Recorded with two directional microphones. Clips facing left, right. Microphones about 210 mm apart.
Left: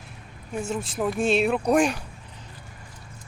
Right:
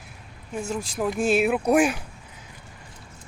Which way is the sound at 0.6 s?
5° left (ahead or behind).